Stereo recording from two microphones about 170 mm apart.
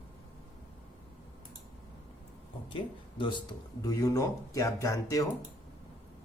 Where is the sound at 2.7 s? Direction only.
30° left (ahead or behind).